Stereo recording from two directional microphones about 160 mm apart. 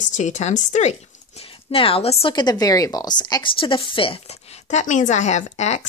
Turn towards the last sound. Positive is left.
turn(degrees=45)  # may be behind; listen again after turning